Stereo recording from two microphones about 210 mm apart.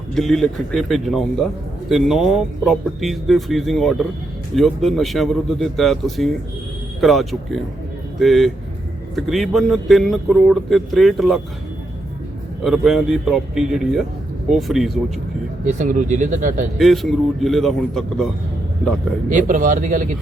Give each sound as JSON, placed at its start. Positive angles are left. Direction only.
{"t": 0.1, "sound": "speech", "side_deg": 0}
{"t": 12.6, "sound": "speech", "side_deg": 0}
{"t": 15.6, "sound": "speech", "side_deg": -40}
{"t": 16.7, "sound": "speech", "side_deg": 0}
{"t": 19.3, "sound": "speech", "side_deg": -35}